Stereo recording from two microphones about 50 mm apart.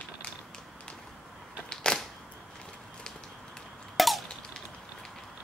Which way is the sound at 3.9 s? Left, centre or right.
Centre.